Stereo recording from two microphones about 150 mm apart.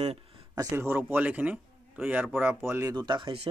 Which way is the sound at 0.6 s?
15° right (ahead or behind).